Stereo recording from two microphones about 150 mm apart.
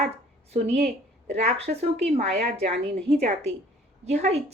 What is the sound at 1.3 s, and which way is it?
A woman's voice, 45° right (ahead or behind).